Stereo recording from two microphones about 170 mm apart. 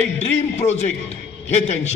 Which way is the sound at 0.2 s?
40° left (ahead or behind).